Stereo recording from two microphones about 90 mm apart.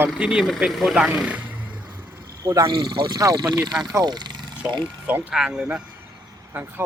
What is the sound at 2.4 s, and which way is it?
Speech, 35° right (ahead or behind).